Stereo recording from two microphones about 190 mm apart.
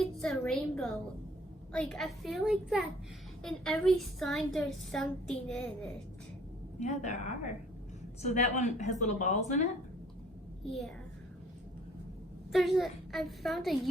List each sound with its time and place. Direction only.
0.0 s a woman's voice: centre (ahead or behind)
6.7 s a woman's voice: 35° left (ahead or behind)
10.7 s a woman's voice: centre (ahead or behind)
12.5 s a woman's voice: centre (ahead or behind)